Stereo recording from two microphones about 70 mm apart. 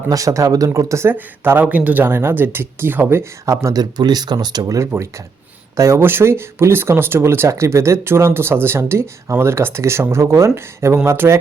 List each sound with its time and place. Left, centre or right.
0.1 s speech: right
1.1 s speech: right
3.4 s speech: right
3.8 s speech: right
5.7 s speech: right
8.8 s speech: right